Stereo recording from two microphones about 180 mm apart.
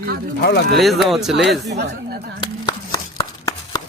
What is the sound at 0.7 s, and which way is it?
Speech, centre (ahead or behind).